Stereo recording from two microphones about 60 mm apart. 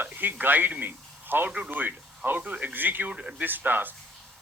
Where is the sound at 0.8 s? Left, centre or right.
Right.